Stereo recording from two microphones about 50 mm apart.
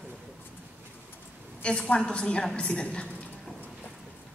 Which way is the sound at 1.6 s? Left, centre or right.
Left.